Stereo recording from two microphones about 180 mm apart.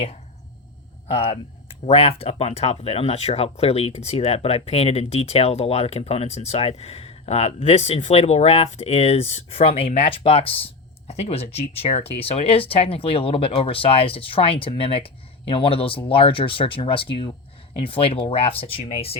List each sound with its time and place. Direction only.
1.0 s speech: 30° left (ahead or behind)